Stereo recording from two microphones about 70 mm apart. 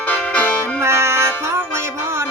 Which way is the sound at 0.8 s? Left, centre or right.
Right.